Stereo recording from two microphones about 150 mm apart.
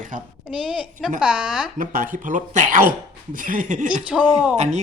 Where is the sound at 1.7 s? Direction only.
65° right (ahead or behind).